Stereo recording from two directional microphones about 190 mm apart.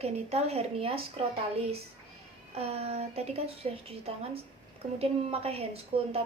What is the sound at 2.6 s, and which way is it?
A woman's voice, 35° right (ahead or behind).